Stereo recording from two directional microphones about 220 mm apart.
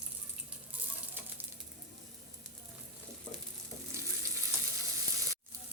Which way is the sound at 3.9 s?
10° right (ahead or behind).